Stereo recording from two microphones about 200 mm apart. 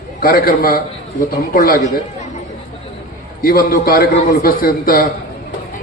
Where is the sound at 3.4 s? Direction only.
45° left (ahead or behind).